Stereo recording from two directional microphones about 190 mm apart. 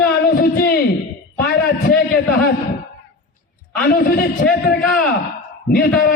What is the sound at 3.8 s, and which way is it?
Speech, 50° left (ahead or behind).